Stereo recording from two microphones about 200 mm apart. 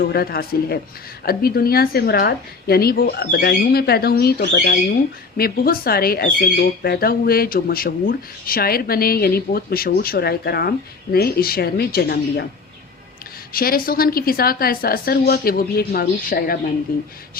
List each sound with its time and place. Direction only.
0.0 s speech: 50° left (ahead or behind)
13.5 s speech: 45° left (ahead or behind)